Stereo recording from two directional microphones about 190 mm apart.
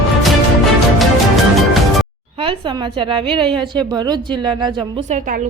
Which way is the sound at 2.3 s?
30° right (ahead or behind).